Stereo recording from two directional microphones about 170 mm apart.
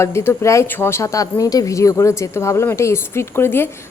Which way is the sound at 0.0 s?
15° left (ahead or behind).